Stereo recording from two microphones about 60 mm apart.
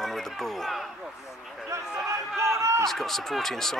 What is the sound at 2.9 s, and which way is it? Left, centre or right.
Speech, centre.